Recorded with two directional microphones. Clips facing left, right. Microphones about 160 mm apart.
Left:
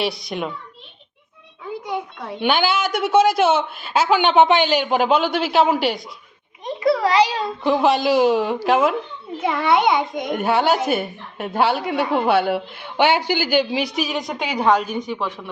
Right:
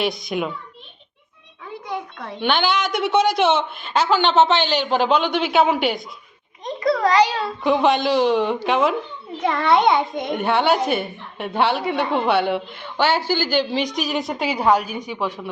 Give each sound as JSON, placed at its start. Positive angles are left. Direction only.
{"t": 0.0, "sound": "a child's voice", "side_deg": 0}
{"t": 1.9, "sound": "a woman's voice", "side_deg": 10}
{"t": 7.6, "sound": "a child's voice", "side_deg": 0}